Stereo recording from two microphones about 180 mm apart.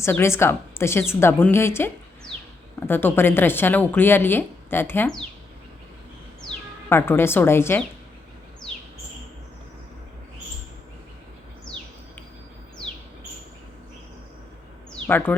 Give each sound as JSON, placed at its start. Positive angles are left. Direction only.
{"t": 0.0, "sound": "a woman's voice", "side_deg": 15}
{"t": 6.9, "sound": "a woman's voice", "side_deg": 15}
{"t": 15.0, "sound": "speech", "side_deg": 10}